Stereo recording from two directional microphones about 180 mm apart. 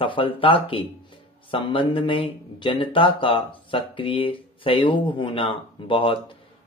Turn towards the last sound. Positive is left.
turn(degrees=30)  # may be behind; listen again after turning